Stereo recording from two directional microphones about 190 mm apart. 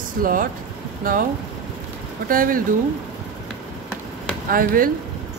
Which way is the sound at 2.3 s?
45° right (ahead or behind).